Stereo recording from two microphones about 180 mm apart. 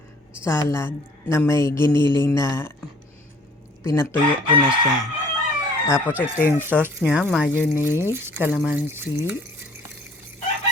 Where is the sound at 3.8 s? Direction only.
15° left (ahead or behind).